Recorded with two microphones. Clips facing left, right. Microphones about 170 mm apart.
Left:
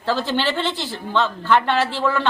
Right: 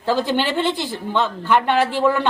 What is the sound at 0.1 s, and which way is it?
A woman's voice, 15° right (ahead or behind).